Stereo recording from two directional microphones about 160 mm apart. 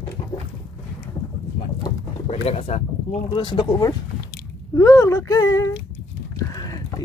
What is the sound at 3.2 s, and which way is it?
Speech, 30° left (ahead or behind).